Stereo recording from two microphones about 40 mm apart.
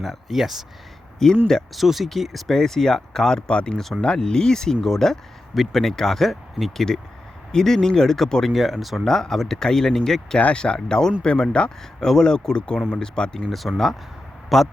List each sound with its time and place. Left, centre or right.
0.0 s speech: centre
1.2 s speech: centre
1.7 s speech: centre
9.0 s speech: centre
10.3 s speech: left
11.9 s speech: centre
13.5 s speech: centre